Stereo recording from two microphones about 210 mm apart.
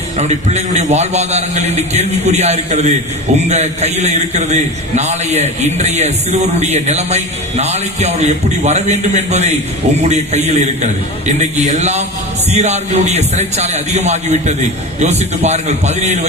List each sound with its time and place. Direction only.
0.2 s a man's voice: 30° right (ahead or behind)